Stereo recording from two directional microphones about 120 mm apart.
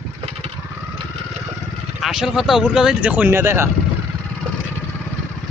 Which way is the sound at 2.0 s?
Centre (ahead or behind).